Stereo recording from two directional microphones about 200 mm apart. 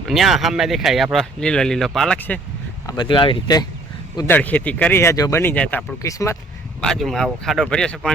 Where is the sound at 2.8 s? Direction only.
25° left (ahead or behind).